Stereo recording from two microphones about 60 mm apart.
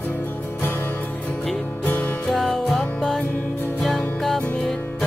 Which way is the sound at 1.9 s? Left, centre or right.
Left.